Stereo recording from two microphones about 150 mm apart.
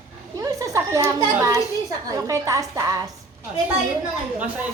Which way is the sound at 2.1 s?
20° right (ahead or behind).